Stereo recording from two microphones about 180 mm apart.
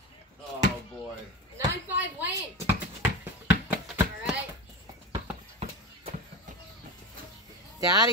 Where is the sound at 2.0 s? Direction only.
10° right (ahead or behind).